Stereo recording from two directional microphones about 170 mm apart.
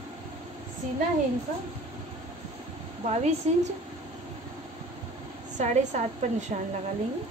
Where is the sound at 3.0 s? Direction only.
40° right (ahead or behind).